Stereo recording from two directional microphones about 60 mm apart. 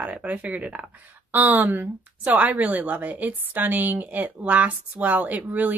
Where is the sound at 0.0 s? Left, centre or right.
Right.